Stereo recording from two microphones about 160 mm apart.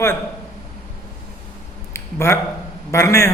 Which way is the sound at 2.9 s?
15° left (ahead or behind).